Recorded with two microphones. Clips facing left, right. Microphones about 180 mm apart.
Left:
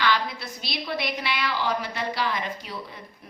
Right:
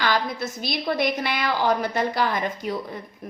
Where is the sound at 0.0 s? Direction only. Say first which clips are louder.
Right 2 dB; 45° right (ahead or behind).